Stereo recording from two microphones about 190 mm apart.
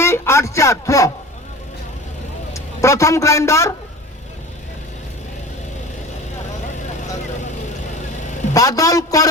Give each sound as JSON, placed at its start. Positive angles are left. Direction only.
{"t": 0.0, "sound": "a sound", "side_deg": 15}
{"t": 2.5, "sound": "a man's voice", "side_deg": 15}
{"t": 8.5, "sound": "a woman's voice", "side_deg": 20}